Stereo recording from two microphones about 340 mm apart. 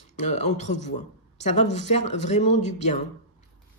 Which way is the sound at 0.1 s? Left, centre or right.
Centre.